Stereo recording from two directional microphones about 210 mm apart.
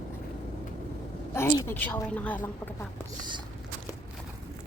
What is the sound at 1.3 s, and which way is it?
Speech, 10° left (ahead or behind).